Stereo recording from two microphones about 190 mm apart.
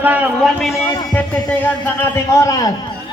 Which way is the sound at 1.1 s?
10° left (ahead or behind).